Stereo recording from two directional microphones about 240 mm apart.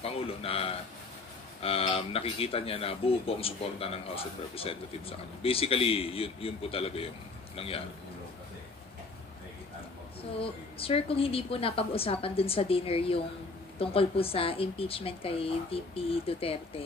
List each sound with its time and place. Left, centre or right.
0.0 s speech: left
10.4 s speech: left